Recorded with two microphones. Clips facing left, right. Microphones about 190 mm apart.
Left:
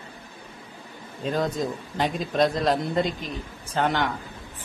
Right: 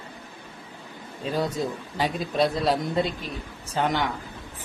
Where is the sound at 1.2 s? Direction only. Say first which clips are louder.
Left 1 dB; 5° right (ahead or behind).